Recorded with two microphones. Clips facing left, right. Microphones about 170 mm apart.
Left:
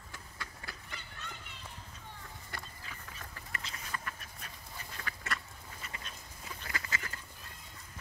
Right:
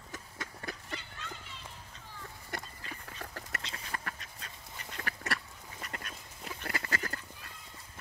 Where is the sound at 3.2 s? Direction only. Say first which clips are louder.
Right 5 dB; 65° right (ahead or behind).